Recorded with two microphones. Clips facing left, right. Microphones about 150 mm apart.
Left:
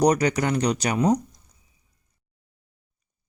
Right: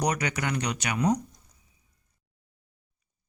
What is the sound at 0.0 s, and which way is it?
Speech, 35° left (ahead or behind).